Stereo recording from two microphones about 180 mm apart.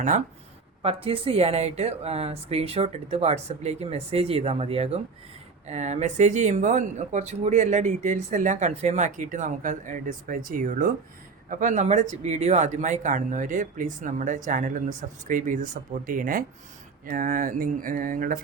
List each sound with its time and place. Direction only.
0.8 s speech: 30° right (ahead or behind); by 18.3 s 50° right (ahead or behind)